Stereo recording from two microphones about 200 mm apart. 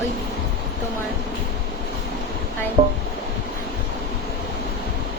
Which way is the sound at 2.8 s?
35° right (ahead or behind).